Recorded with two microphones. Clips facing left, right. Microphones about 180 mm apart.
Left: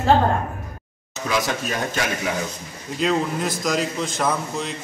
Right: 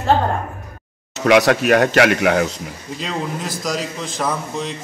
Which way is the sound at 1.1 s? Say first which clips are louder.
Right 10 dB; 75° right (ahead or behind).